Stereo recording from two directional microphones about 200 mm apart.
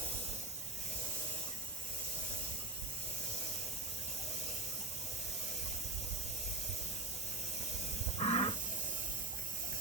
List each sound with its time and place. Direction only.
8.2 s wild animals: 25° left (ahead or behind)